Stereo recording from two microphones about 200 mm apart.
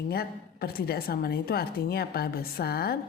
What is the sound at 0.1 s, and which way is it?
A woman's voice, 50° left (ahead or behind).